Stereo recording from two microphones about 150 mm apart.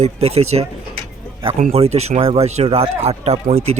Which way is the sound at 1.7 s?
45° right (ahead or behind).